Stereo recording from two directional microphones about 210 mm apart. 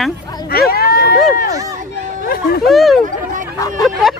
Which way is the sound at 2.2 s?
45° left (ahead or behind).